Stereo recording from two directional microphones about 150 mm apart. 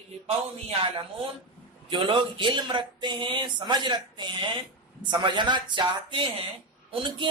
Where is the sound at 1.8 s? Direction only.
35° right (ahead or behind).